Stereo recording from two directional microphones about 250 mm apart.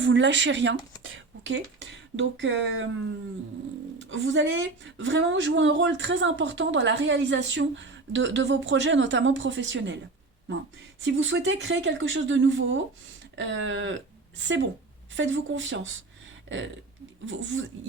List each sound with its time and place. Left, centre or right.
0.0 s speech: right
4.1 s speech: right
11.0 s speech: right